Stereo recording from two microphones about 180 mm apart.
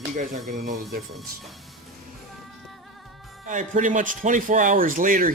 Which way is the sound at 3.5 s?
45° right (ahead or behind).